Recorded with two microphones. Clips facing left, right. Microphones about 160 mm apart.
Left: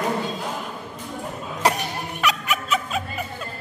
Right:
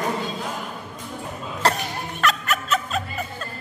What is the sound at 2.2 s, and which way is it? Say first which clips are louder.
Music: right 1 dB; 10° left (ahead or behind).